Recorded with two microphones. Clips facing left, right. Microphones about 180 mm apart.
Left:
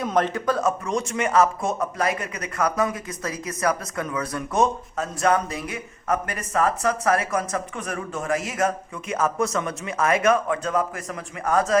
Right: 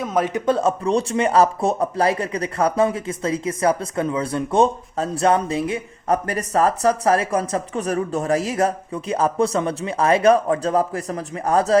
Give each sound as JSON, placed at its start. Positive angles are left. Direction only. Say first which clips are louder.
{"t": 0.0, "sound": "speech", "louder": "right 1 dB", "side_deg": -5}
{"t": 0.3, "sound": "speech", "louder": "right 4 dB", "side_deg": -25}